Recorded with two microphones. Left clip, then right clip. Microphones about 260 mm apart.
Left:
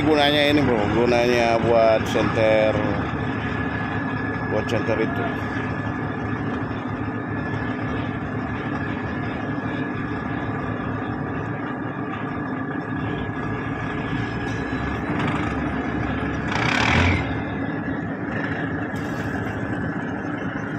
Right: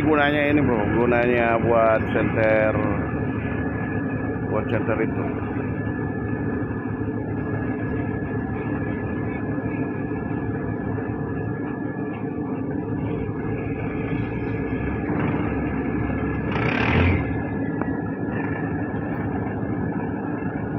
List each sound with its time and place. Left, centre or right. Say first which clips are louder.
0.1 s speech: left 2 dB; left
16.5 s vehicle: left 3 dB; left